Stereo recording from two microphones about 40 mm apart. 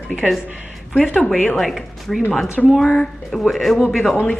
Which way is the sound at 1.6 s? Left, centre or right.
Centre.